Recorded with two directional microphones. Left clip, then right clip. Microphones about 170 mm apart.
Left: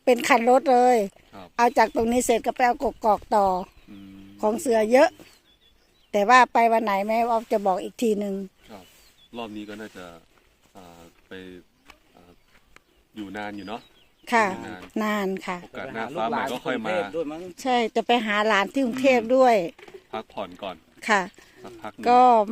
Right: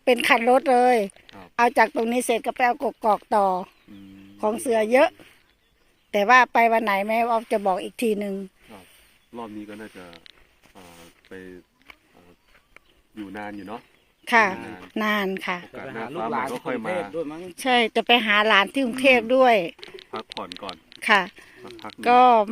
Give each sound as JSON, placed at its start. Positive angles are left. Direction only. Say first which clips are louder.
{"t": 0.0, "sound": "speech", "louder": "even", "side_deg": 10}
{"t": 13.2, "sound": "speech", "louder": "left 1 dB", "side_deg": 5}
{"t": 16.5, "sound": "speech", "louder": "left 1 dB", "side_deg": 20}
{"t": 17.2, "sound": "speech", "louder": "left 1 dB", "side_deg": -50}
{"t": 17.5, "sound": "speech", "louder": "right 3 dB", "side_deg": 0}
{"t": 20.4, "sound": "speech", "louder": "left 1 dB", "side_deg": 25}
{"t": 21.0, "sound": "speech", "louder": "right 3 dB", "side_deg": 10}